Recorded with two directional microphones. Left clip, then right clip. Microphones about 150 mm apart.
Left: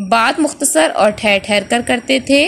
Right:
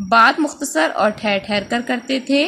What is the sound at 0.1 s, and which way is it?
A woman's voice, 15° left (ahead or behind).